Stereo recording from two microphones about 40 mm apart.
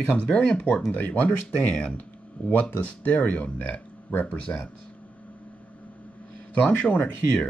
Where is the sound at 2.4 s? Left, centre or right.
Left.